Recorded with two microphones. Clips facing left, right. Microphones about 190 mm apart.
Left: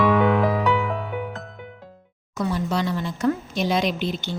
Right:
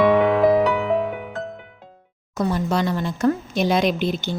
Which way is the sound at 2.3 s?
45° right (ahead or behind).